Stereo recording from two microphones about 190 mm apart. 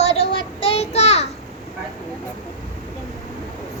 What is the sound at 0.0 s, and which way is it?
Child singing, 30° left (ahead or behind).